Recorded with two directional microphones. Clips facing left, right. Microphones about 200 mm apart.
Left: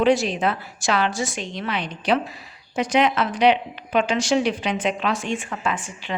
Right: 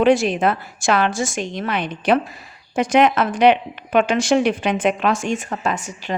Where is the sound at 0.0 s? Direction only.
55° right (ahead or behind).